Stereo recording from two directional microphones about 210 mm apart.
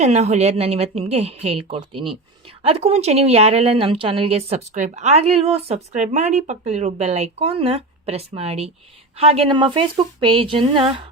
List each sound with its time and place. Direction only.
0.0 s a woman's voice: 30° right (ahead or behind)